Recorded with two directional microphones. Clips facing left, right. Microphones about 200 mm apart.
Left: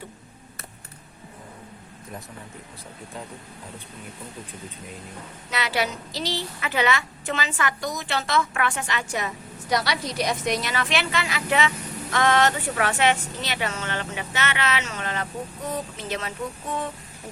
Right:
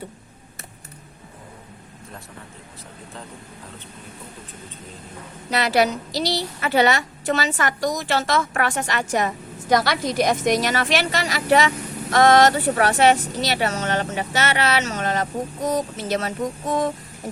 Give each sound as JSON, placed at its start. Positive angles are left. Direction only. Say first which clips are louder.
{"t": 5.5, "sound": "a woman's voice", "louder": "right 7 dB", "side_deg": -40}